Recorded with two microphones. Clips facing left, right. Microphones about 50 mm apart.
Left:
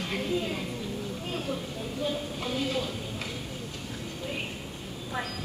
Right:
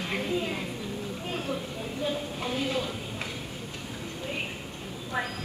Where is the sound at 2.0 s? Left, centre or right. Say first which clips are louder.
Right 1 dB; centre.